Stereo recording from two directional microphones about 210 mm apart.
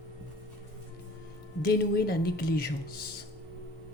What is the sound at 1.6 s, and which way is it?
Speech, 45° left (ahead or behind).